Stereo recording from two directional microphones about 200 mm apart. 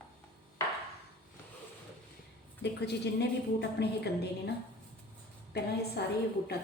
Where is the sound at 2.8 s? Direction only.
55° left (ahead or behind).